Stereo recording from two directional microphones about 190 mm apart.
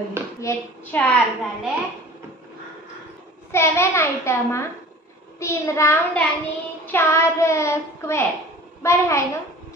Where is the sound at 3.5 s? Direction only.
15° left (ahead or behind).